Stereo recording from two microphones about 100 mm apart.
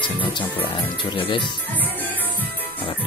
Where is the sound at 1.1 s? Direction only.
60° left (ahead or behind).